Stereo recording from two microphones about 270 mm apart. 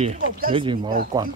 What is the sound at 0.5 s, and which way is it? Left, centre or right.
Speech, centre.